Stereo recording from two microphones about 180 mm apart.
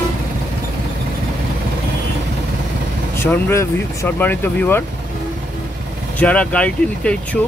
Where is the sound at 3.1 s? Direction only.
15° left (ahead or behind).